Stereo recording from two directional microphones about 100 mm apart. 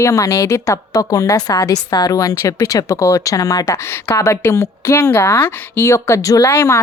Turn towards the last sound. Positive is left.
turn(degrees=25)  # may be behind; listen again after turning